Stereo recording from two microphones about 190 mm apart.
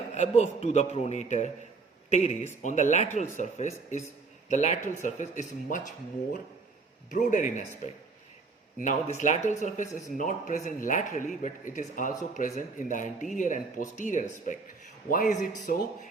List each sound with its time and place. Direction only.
0.1 s a man's voice: 35° left (ahead or behind)
7.1 s a man's voice: 40° left (ahead or behind)
8.8 s a man's voice: 40° left (ahead or behind)